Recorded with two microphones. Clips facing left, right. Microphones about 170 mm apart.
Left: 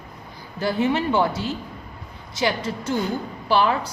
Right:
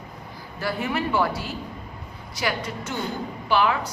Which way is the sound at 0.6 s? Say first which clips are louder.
Left 5 dB; 25° left (ahead or behind).